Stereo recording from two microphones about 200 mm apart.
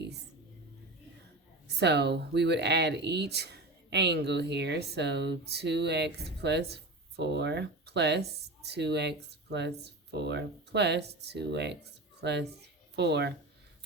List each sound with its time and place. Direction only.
1.7 s speech: 55° right (ahead or behind)